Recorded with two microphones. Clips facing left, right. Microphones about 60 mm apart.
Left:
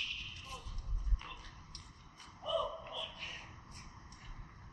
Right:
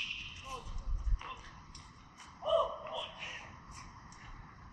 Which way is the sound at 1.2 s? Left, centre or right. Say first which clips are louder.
Right 6 dB; centre.